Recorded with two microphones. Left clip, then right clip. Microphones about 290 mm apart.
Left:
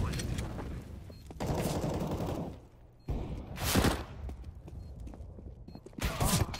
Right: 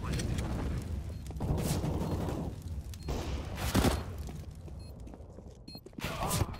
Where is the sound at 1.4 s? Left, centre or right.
Left.